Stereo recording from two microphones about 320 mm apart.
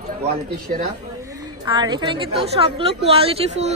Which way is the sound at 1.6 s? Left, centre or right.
Centre.